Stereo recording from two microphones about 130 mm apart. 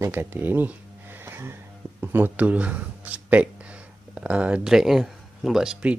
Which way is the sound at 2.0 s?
15° right (ahead or behind).